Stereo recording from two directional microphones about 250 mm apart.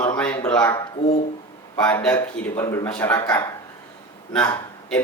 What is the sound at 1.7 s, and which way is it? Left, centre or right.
A man's voice, centre.